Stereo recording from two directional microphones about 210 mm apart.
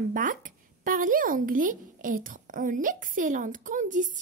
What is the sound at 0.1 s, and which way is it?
A woman's voice, 40° right (ahead or behind).